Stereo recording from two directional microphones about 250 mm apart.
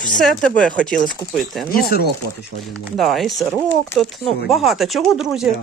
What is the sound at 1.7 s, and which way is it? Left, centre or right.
Speech, left.